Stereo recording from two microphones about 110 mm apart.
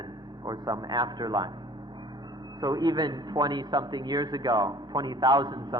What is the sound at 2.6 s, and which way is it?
A man's voice, 35° right (ahead or behind).